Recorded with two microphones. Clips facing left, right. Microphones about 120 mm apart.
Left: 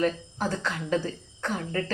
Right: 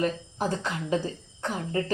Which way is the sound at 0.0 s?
20° right (ahead or behind).